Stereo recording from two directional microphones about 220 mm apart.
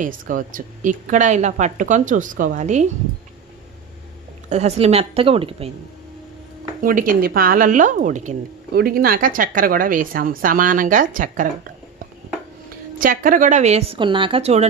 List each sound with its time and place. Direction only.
0.0 s a woman's voice: 40° right (ahead or behind)
4.5 s a woman's voice: 30° right (ahead or behind)
6.8 s a woman's voice: 40° right (ahead or behind)
13.0 s a woman's voice: 40° right (ahead or behind)